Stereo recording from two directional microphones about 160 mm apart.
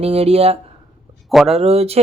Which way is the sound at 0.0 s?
40° right (ahead or behind).